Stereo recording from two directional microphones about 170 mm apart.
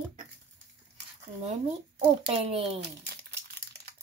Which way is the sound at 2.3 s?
35° right (ahead or behind).